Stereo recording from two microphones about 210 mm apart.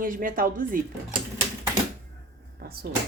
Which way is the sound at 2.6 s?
50° right (ahead or behind).